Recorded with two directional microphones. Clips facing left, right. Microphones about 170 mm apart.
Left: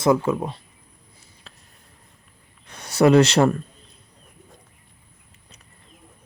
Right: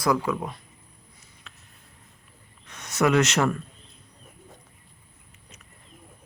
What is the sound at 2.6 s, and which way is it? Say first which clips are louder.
Speech: left 6 dB; 35° left (ahead or behind).